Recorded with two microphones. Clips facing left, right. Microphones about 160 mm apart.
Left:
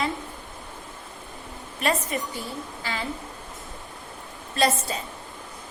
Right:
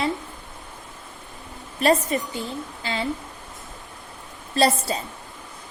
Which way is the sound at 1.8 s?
35° right (ahead or behind).